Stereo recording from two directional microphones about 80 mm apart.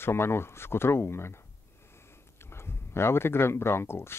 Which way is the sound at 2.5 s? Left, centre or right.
Left.